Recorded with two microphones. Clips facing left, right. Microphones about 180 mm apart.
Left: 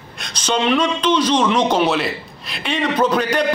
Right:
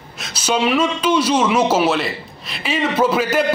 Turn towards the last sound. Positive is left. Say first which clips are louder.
# even
turn(degrees=-5)  # may be behind; listen again after turning